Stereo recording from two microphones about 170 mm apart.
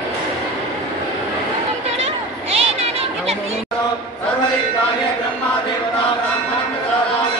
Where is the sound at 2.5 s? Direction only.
35° right (ahead or behind).